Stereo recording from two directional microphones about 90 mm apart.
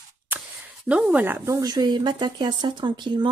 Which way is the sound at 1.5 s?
45° right (ahead or behind).